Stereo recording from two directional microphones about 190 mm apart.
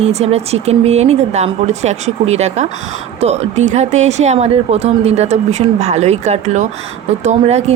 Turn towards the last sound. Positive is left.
turn(degrees=-35)  # may be behind; listen again after turning